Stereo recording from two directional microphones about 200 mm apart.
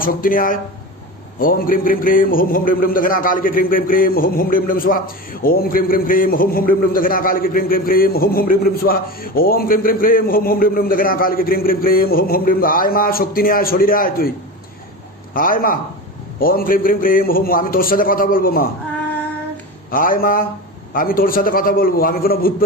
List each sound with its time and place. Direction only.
0.0 s a man's voice: 45° left (ahead or behind)
15.3 s a man's voice: 45° left (ahead or behind)
19.9 s a man's voice: 45° left (ahead or behind)